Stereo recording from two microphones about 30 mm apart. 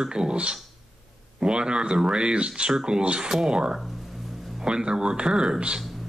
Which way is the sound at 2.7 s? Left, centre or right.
Right.